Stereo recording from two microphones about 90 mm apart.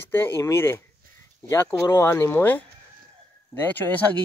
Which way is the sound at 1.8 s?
30° left (ahead or behind).